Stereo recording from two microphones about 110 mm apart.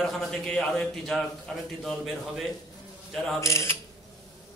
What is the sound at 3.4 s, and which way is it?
Speech, 25° left (ahead or behind).